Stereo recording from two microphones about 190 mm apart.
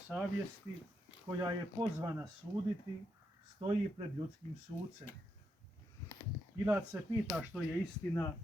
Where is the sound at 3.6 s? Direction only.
30° right (ahead or behind).